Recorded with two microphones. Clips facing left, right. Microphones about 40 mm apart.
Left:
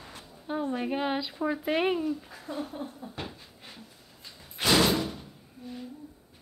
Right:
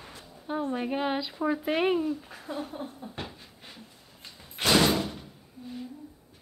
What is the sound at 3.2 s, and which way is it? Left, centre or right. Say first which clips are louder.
Pant: even; centre.